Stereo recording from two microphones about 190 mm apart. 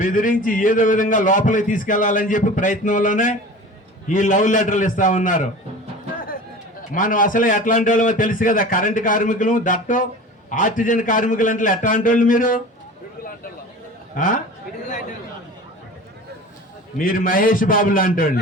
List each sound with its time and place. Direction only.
0.0 s a man's voice: 45° left (ahead or behind)
6.9 s a man's voice: 45° left (ahead or behind)
14.2 s a man's voice: 45° left (ahead or behind)
17.0 s a man's voice: 45° left (ahead or behind)